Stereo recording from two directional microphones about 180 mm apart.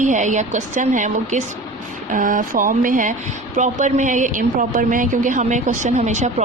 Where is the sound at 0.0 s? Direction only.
45° right (ahead or behind).